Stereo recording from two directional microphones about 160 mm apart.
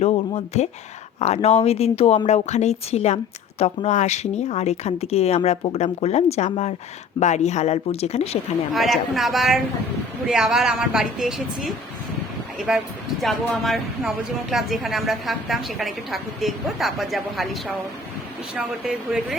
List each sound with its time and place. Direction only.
0.0 s a woman's voice: 40° left (ahead or behind)
8.7 s a woman's voice: centre (ahead or behind)